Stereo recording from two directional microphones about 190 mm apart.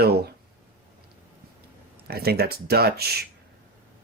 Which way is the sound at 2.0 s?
55° right (ahead or behind).